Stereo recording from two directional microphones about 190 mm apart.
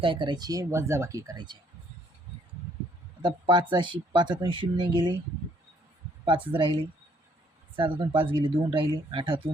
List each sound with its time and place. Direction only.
0.0 s speech: 25° right (ahead or behind)
3.2 s speech: 25° right (ahead or behind)
6.2 s speech: 25° right (ahead or behind)
7.8 s speech: 25° right (ahead or behind)